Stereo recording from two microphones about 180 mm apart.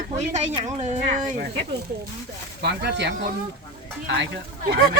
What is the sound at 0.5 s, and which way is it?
Speech, 40° right (ahead or behind).